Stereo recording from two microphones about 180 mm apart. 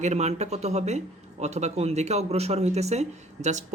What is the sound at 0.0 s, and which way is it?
Speech, 40° right (ahead or behind).